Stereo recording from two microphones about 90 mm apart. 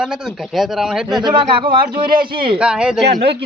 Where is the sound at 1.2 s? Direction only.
60° right (ahead or behind).